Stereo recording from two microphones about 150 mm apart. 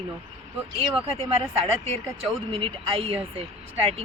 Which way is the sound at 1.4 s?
40° right (ahead or behind).